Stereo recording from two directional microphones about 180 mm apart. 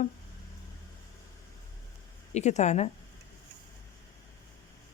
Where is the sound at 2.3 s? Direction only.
40° left (ahead or behind).